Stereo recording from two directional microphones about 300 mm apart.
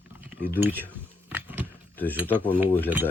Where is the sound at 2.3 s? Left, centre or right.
Centre.